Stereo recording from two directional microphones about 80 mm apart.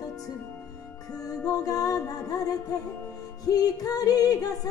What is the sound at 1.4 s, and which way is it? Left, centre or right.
Music, left.